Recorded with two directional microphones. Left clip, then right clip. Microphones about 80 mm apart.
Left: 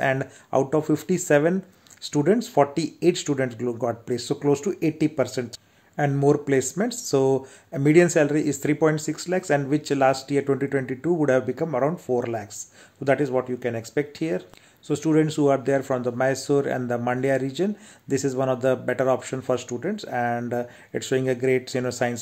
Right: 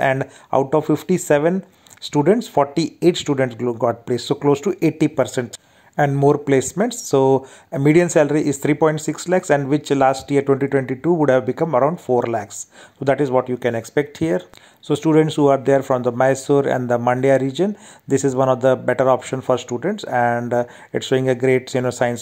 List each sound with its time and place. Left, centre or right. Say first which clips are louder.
0.0 s speech: right 5 dB; right
0.7 s speech: right 5 dB; right